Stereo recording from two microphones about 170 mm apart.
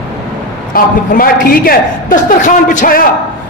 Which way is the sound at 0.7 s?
55° left (ahead or behind).